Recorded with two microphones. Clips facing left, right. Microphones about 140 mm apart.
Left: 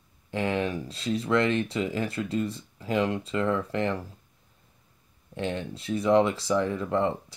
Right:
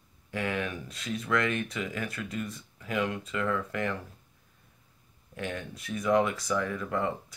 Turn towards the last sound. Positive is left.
turn(degrees=25)  # may be behind; listen again after turning